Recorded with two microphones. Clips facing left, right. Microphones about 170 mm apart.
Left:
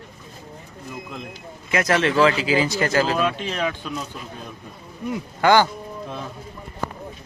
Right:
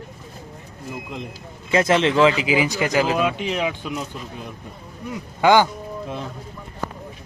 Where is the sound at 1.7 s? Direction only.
25° right (ahead or behind).